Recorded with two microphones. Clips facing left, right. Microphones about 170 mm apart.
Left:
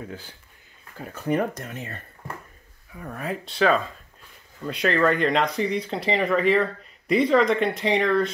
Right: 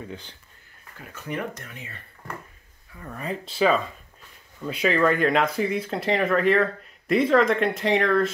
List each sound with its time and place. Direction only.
0.0 s speech: 5° left (ahead or behind)
0.9 s speech: 35° left (ahead or behind)
3.0 s speech: 5° left (ahead or behind)